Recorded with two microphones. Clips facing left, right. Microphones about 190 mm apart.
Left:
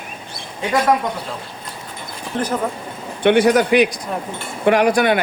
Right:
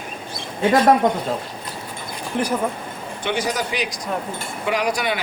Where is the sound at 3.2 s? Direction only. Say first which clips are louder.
Left 11 dB; 60° left (ahead or behind).